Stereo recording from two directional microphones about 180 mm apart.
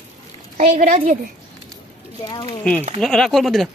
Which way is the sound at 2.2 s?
25° left (ahead or behind).